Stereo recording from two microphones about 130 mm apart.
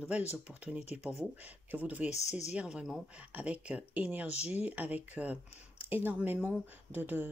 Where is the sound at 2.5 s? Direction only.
10° right (ahead or behind).